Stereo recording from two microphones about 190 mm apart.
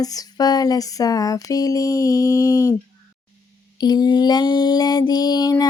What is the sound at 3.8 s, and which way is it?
Mantra, 20° left (ahead or behind).